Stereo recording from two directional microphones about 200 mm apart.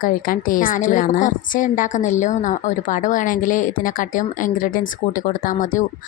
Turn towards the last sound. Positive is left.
turn(degrees=40)  # may be behind; listen again after turning